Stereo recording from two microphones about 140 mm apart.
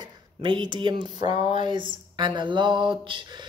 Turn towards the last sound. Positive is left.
turn(degrees=-35)  # may be behind; listen again after turning